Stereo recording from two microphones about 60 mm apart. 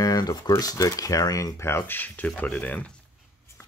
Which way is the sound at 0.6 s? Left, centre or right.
Left.